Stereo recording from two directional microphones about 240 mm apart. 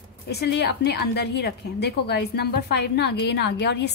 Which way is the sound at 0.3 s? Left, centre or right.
Left.